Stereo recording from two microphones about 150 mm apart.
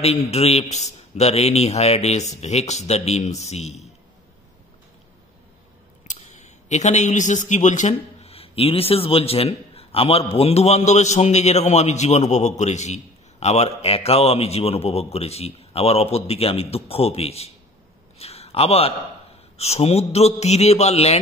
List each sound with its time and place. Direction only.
0.0 s speech: 45° left (ahead or behind)
6.0 s speech: 50° left (ahead or behind)